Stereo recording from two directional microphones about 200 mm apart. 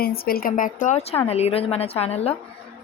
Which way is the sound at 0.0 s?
50° left (ahead or behind).